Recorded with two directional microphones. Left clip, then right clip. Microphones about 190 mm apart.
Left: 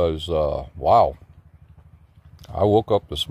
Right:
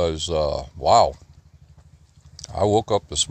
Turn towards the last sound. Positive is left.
turn(degrees=15)  # may be behind; listen again after turning